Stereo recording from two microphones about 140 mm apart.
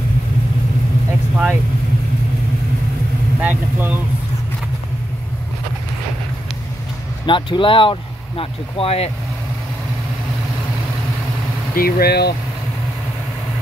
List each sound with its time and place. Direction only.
1.3 s speech: 10° right (ahead or behind)
3.3 s speech: 10° right (ahead or behind)
7.2 s speech: 35° left (ahead or behind)
11.7 s speech: 90° left